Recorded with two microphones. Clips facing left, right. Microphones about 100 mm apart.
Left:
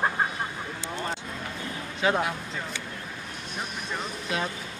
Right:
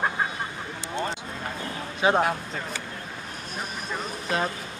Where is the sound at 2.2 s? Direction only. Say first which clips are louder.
Right 4 dB; 45° right (ahead or behind).